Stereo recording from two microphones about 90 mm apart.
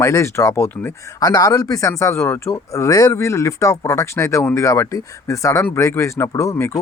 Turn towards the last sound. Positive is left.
turn(degrees=35)  # may be behind; listen again after turning